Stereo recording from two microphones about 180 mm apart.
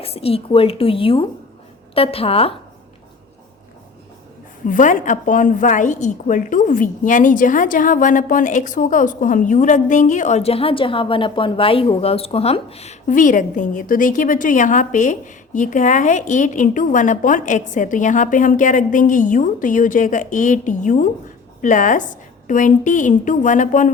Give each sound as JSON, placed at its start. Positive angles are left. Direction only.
{"t": 0.0, "sound": "a woman's voice", "side_deg": 35}
{"t": 4.6, "sound": "a woman's voice", "side_deg": 45}